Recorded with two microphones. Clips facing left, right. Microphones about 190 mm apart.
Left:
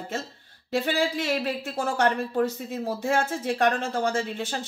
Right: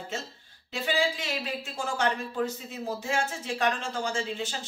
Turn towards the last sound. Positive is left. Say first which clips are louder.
# left 4 dB
turn(degrees=55)  # may be behind; listen again after turning